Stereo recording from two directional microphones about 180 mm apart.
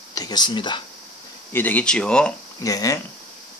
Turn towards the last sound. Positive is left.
turn(degrees=20)  # may be behind; listen again after turning